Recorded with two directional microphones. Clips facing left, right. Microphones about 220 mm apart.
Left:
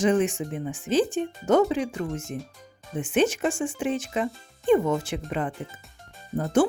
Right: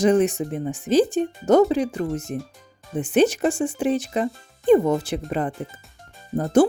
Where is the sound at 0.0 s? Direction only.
40° right (ahead or behind).